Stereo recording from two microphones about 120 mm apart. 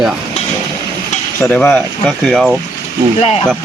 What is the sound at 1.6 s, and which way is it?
Speech, 5° left (ahead or behind).